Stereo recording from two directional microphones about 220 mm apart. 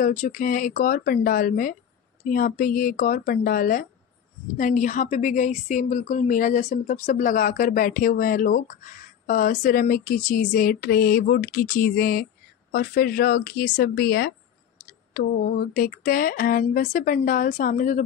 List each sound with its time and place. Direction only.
0.0 s a woman's voice: 35° left (ahead or behind)